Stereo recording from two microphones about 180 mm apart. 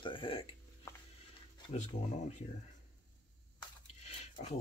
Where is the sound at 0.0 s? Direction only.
30° left (ahead or behind).